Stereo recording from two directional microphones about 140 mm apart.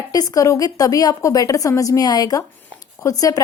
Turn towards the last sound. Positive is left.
turn(degrees=25)  # may be behind; listen again after turning